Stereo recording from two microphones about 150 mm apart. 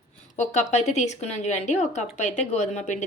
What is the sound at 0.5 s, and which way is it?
Speech, 50° left (ahead or behind).